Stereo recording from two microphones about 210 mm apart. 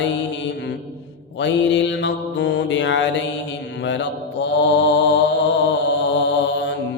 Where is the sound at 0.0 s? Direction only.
60° left (ahead or behind).